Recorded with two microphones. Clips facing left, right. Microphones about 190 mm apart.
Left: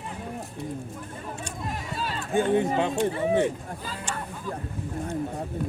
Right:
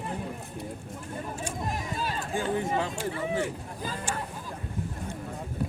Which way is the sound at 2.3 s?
20° left (ahead or behind).